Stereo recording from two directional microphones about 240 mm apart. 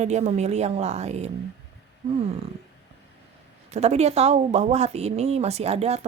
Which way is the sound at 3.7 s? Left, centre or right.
Right.